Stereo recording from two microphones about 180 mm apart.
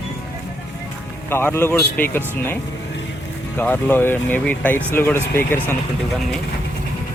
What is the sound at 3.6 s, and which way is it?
A man's voice, 10° left (ahead or behind).